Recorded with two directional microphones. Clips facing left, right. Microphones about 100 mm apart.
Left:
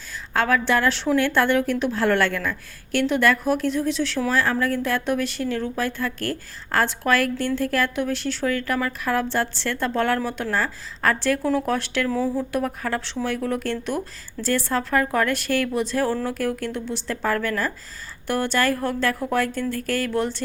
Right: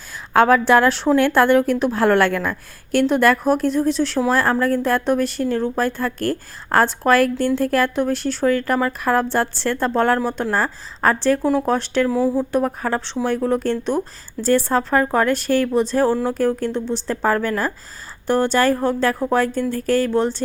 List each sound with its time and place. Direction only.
0.3 s a woman's voice: 45° right (ahead or behind); by 12.0 s 30° right (ahead or behind)
12.1 s speech: 10° right (ahead or behind)
12.4 s speech: 30° right (ahead or behind)